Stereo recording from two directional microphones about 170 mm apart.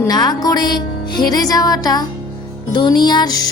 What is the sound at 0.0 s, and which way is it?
Music, 25° left (ahead or behind).